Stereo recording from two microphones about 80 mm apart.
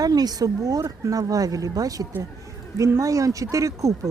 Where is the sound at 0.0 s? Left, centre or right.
Right.